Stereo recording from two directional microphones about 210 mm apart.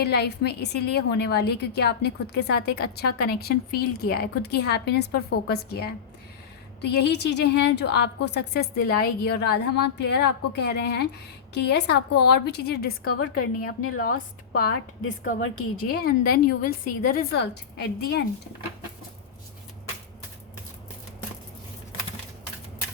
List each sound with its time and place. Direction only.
0.0 s a woman's voice: 50° left (ahead or behind)
13.1 s speech: 90° left
14.7 s a woman's voice: 65° left (ahead or behind)
15.4 s speech: 90° left
15.9 s a woman's voice: 45° left (ahead or behind)